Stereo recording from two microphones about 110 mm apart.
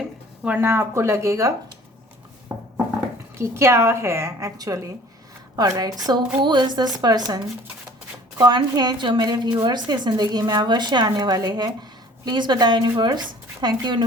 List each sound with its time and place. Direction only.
0.4 s a woman's voice: 20° right (ahead or behind)
3.3 s a woman's voice: 25° right (ahead or behind); by 14.0 s 40° right (ahead or behind)